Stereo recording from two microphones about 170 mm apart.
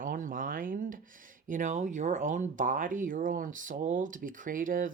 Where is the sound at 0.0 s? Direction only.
55° right (ahead or behind).